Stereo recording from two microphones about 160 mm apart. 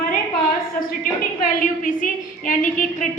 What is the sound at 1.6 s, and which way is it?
A woman's voice, 55° left (ahead or behind).